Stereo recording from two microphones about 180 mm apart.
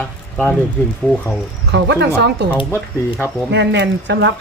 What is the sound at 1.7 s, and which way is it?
Speech, 70° right (ahead or behind).